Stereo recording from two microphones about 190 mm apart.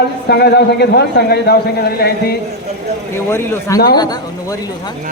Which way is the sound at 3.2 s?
15° left (ahead or behind).